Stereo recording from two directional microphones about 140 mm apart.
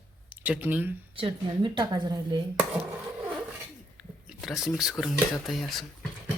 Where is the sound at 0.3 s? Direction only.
10° right (ahead or behind).